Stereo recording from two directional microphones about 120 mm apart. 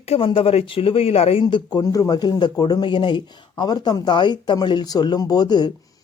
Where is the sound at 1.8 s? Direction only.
30° left (ahead or behind).